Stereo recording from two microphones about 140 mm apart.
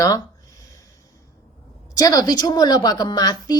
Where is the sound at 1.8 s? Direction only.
25° left (ahead or behind).